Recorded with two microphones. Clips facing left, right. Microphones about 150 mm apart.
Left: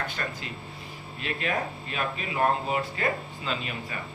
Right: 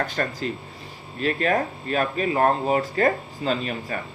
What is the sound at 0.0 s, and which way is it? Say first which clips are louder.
Speech: right 8 dB; 40° right (ahead or behind).